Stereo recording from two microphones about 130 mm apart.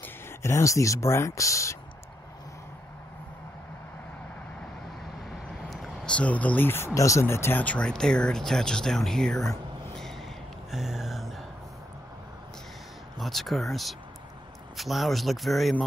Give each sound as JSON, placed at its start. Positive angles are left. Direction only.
{"t": 0.0, "sound": "speech", "side_deg": 20}
{"t": 5.7, "sound": "speech", "side_deg": 0}
{"t": 10.7, "sound": "a sound", "side_deg": 0}
{"t": 13.2, "sound": "speech", "side_deg": 0}